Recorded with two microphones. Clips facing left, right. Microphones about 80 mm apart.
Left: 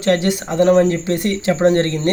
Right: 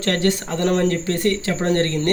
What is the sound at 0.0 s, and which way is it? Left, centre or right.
Speech, centre.